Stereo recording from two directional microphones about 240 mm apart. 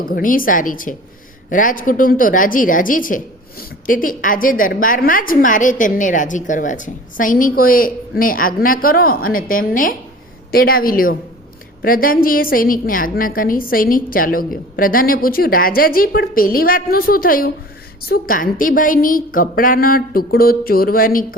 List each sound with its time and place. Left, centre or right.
0.1 s a woman's voice: left